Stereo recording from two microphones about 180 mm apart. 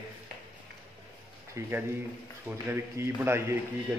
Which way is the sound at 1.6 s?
15° right (ahead or behind).